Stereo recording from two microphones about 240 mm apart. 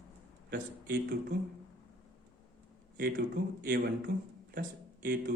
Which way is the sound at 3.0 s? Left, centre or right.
Right.